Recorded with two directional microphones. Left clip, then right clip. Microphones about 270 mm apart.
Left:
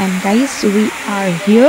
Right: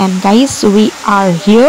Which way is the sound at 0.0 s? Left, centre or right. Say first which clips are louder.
Right 5 dB; right.